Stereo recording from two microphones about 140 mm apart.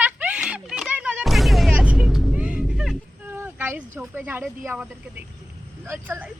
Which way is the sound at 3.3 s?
15° right (ahead or behind).